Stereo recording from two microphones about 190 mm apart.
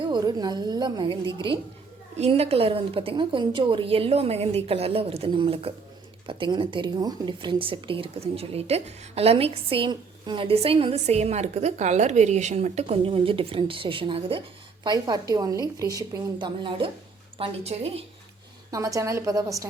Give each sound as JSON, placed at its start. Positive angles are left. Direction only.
{"t": 0.0, "sound": "a woman's voice", "side_deg": -25}
{"t": 18.7, "sound": "a woman's voice", "side_deg": -15}